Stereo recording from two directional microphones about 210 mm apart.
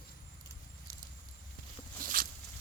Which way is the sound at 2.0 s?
40° right (ahead or behind).